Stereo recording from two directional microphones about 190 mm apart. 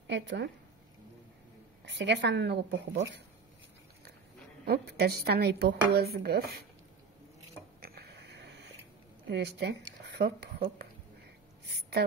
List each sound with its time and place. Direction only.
0.0 s speech: 70° right (ahead or behind)
1.9 s speech: 70° right (ahead or behind)
4.6 s speech: 60° right (ahead or behind)
7.8 s a sound: 60° right (ahead or behind)
9.3 s speech: 65° right (ahead or behind)